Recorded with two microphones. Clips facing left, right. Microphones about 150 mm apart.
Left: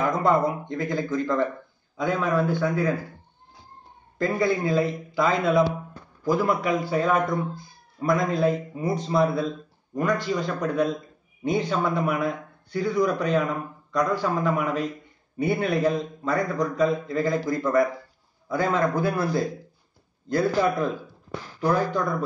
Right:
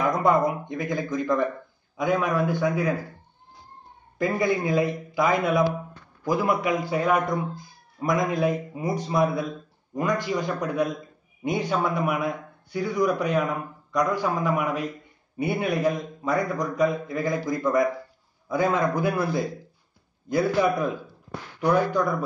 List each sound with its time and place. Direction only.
0.2 s a man's voice: 15° right (ahead or behind)
4.2 s a man's voice: 15° right (ahead or behind)